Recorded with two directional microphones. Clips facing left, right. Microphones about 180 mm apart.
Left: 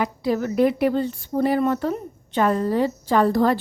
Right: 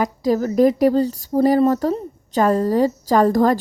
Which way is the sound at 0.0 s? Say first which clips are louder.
Right 4 dB; 40° right (ahead or behind).